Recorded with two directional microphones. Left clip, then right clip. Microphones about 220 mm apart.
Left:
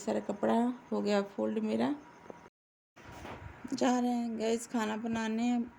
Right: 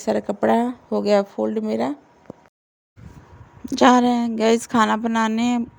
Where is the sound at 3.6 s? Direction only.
40° right (ahead or behind).